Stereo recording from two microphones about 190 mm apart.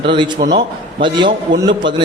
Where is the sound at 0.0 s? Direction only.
25° right (ahead or behind).